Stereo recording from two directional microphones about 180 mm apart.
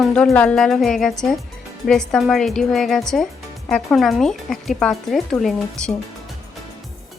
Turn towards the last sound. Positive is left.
turn(degrees=0)  # may be behind; listen again after turning